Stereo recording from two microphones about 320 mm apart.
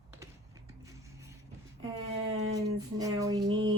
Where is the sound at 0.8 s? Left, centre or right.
Centre.